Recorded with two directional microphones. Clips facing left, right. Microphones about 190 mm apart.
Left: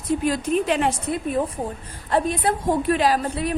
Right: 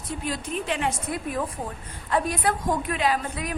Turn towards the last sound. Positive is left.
turn(degrees=35)  # may be behind; listen again after turning